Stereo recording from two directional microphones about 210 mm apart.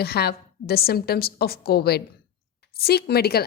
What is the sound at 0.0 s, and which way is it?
A woman's voice, 50° left (ahead or behind).